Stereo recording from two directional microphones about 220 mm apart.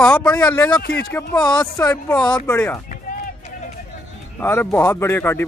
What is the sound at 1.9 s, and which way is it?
Speech, 5° left (ahead or behind).